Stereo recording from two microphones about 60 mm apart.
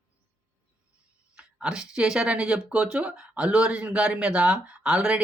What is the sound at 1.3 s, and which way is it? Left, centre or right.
Speech, centre.